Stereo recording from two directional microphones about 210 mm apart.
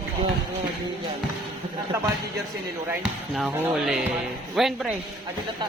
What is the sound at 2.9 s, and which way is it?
Speech, centre (ahead or behind).